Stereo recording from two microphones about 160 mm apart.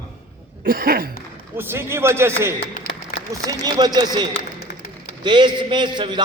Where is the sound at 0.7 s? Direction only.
65° right (ahead or behind).